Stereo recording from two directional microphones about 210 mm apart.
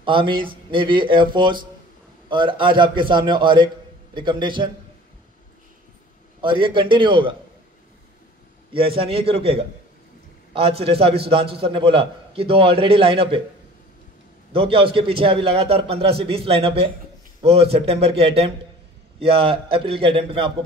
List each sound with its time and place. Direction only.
0.0 s a man's voice: 25° right (ahead or behind)
6.4 s a man's voice: 25° right (ahead or behind)
8.7 s a man's voice: 25° right (ahead or behind)
14.5 s a man's voice: 25° right (ahead or behind)